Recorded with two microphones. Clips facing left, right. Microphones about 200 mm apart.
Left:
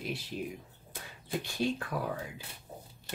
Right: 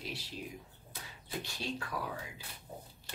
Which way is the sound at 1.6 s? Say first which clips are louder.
Left 9 dB; 50° left (ahead or behind).